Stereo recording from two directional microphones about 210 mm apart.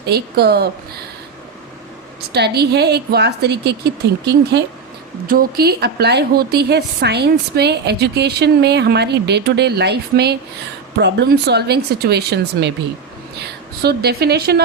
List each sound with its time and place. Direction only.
0.1 s a woman's voice: 50° right (ahead or behind)
2.3 s a woman's voice: 50° right (ahead or behind)
13.8 s a woman's voice: 50° right (ahead or behind)